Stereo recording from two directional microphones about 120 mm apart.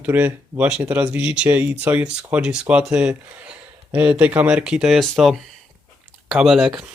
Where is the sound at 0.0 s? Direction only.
15° right (ahead or behind).